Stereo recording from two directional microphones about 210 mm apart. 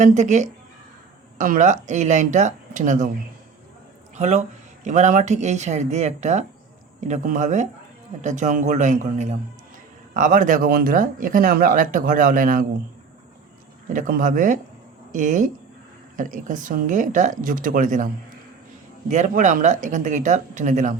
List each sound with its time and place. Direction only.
0.0 s speech: 35° right (ahead or behind)
4.1 s speech: 35° right (ahead or behind)
13.9 s speech: 40° right (ahead or behind)
19.1 s speech: 35° right (ahead or behind)